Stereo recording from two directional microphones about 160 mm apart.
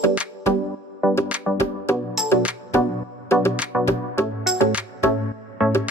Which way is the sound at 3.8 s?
15° left (ahead or behind).